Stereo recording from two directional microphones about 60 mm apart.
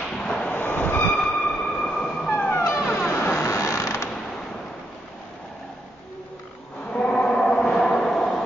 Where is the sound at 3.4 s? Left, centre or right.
Left.